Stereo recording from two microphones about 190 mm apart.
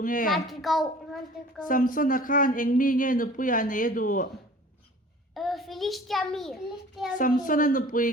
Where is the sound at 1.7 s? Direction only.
45° left (ahead or behind).